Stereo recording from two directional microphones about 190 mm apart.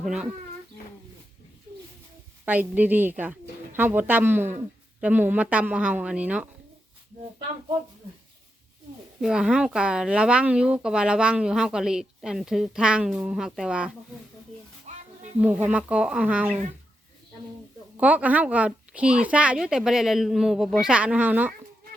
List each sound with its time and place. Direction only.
0.0 s speech: 5° right (ahead or behind)
2.4 s a woman's voice: 10° right (ahead or behind)
9.2 s speech: 5° right (ahead or behind)
14.9 s a sound: 40° right (ahead or behind)
15.4 s a woman's voice: 10° right (ahead or behind)
17.9 s speech: 10° right (ahead or behind)